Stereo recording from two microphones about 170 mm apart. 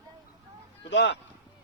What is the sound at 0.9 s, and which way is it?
Speech, 90° left.